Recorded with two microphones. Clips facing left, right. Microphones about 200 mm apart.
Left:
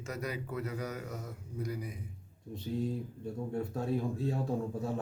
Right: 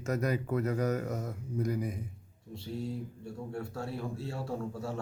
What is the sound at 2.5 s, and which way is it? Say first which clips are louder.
Speech: left 2 dB; 15° left (ahead or behind).